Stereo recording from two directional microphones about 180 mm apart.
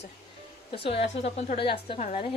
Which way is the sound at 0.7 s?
30° left (ahead or behind).